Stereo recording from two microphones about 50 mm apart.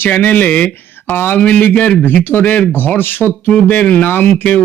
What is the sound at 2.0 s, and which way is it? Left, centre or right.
A man's voice, left.